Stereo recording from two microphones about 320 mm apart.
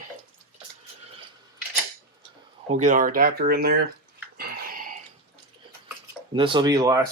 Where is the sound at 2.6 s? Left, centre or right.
Right.